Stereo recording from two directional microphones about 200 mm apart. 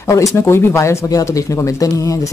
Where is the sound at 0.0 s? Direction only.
15° left (ahead or behind).